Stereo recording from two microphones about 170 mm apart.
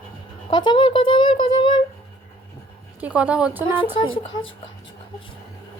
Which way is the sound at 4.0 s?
30° left (ahead or behind).